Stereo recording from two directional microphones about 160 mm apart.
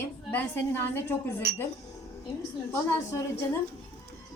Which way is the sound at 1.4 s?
70° right (ahead or behind).